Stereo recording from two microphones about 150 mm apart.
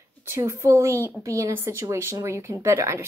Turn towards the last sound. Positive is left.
turn(degrees=-20)  # may be behind; listen again after turning